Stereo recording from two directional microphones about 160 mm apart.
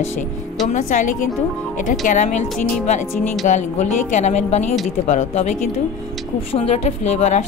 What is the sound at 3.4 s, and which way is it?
Speech, 50° left (ahead or behind).